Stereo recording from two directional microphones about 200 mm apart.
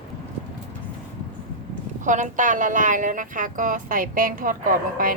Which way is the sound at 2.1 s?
40° right (ahead or behind).